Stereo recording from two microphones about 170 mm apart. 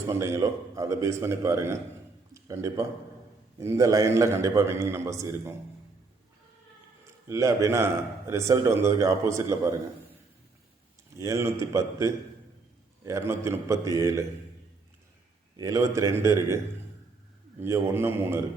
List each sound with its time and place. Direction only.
0.1 s a man's voice: 15° right (ahead or behind)
7.0 s a man's voice: 15° right (ahead or behind)
11.2 s a man's voice: 15° right (ahead or behind)
15.5 s a man's voice: 20° right (ahead or behind)
17.6 s a man's voice: 15° right (ahead or behind)